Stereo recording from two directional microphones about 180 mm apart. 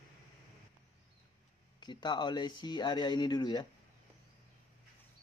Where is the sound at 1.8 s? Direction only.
25° left (ahead or behind).